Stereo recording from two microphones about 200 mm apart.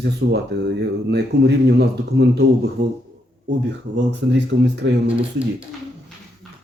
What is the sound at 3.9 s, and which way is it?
Speech, 60° right (ahead or behind).